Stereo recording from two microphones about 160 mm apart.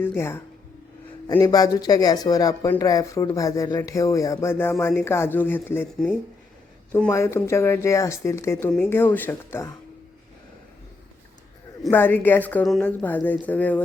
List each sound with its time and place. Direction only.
0.0 s speech: 15° left (ahead or behind)
1.5 s speech: 25° left (ahead or behind)
7.1 s speech: 15° left (ahead or behind)
11.9 s speech: 15° left (ahead or behind)